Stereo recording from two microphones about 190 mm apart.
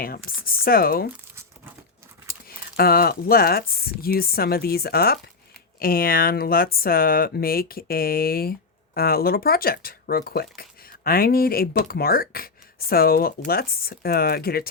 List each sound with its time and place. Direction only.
0.3 s speech: 50° left (ahead or behind)
2.7 s speech: 50° left (ahead or behind)